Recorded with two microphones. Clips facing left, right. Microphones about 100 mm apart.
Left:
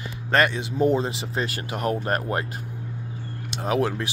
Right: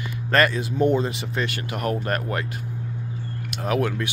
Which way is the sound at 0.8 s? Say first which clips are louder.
Even; 30° left (ahead or behind).